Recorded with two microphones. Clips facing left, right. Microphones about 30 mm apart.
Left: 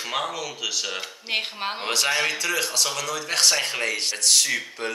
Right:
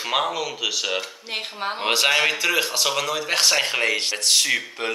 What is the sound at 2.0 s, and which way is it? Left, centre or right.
Speech, right.